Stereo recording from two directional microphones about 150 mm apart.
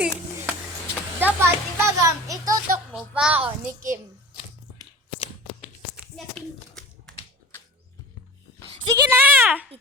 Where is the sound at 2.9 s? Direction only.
5° right (ahead or behind).